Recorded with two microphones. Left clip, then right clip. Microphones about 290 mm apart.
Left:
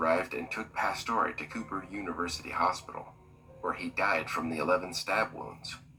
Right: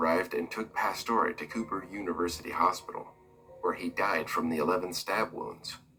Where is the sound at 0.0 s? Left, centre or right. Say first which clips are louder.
Even; centre.